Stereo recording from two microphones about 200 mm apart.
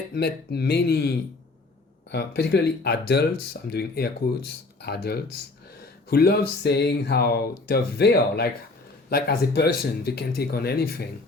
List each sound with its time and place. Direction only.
0.1 s speech: 55° left (ahead or behind)